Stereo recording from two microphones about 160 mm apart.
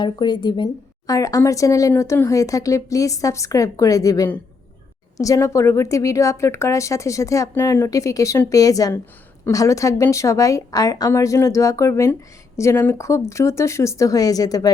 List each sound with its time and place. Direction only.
0.0 s a woman's voice: 30° left (ahead or behind)